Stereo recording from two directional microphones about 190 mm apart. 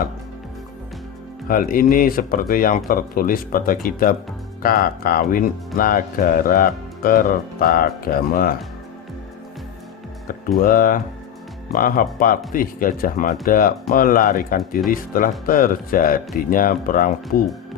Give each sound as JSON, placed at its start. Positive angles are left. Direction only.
{"t": 1.5, "sound": "speech", "side_deg": 50}
{"t": 10.6, "sound": "speech", "side_deg": 50}